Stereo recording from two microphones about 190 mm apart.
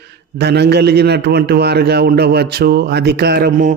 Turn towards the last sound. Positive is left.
turn(degrees=-50)  # may be behind; listen again after turning